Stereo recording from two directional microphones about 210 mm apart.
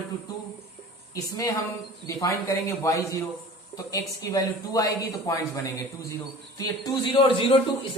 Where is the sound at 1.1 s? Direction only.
15° left (ahead or behind).